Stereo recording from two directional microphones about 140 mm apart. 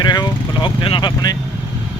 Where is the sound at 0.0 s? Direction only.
30° left (ahead or behind).